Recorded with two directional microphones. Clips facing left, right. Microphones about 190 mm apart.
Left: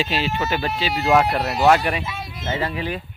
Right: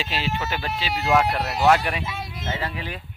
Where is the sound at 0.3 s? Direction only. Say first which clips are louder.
Left 5 dB; 55° left (ahead or behind).